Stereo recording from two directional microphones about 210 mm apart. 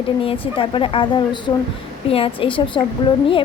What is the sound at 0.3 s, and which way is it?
A woman's voice, 25° left (ahead or behind).